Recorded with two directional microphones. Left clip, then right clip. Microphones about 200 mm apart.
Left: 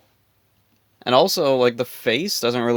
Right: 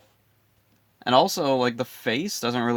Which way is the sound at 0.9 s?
30° left (ahead or behind).